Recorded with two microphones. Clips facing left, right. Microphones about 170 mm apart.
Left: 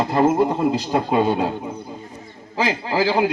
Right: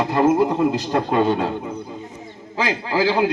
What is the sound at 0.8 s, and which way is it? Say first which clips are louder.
Speech: even; 10° left (ahead or behind).